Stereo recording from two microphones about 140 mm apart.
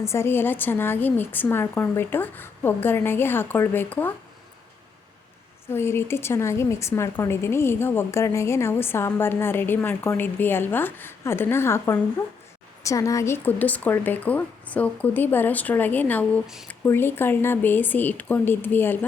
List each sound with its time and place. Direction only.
0.0 s a woman's voice: 20° left (ahead or behind)
5.6 s a woman's voice: 15° left (ahead or behind)